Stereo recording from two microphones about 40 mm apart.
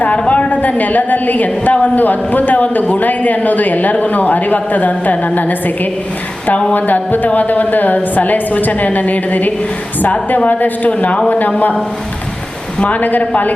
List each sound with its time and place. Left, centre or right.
0.3 s a woman's voice: left
12.8 s a woman's voice: left